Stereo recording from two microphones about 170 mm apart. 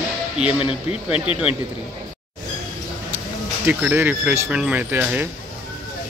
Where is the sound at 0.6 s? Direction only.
35° left (ahead or behind).